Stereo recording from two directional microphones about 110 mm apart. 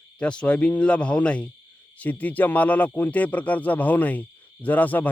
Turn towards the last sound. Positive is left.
turn(degrees=15)  # may be behind; listen again after turning